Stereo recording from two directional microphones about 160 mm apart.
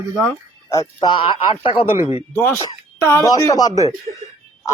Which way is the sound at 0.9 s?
30° left (ahead or behind).